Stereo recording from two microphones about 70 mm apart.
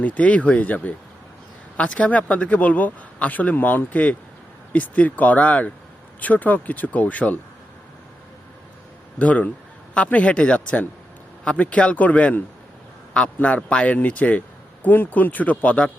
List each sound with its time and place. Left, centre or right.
0.0 s speech: centre
9.1 s speech: left